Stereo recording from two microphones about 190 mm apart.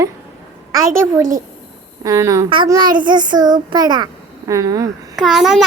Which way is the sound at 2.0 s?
15° right (ahead or behind).